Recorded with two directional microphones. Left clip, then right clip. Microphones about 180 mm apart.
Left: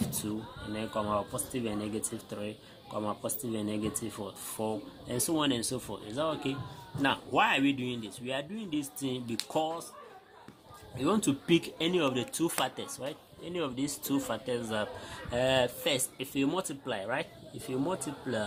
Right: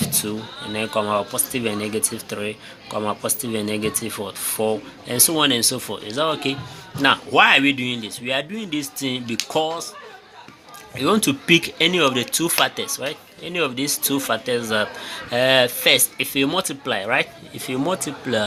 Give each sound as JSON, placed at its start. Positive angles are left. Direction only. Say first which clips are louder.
{"t": 0.7, "sound": "speech", "louder": "right 11 dB", "side_deg": -10}
{"t": 10.9, "sound": "speech", "louder": "right 11 dB", "side_deg": -10}